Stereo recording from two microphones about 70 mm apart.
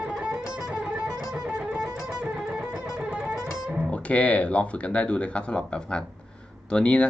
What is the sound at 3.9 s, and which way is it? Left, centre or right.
Speech, centre.